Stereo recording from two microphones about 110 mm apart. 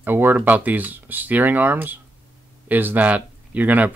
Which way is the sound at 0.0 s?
20° right (ahead or behind).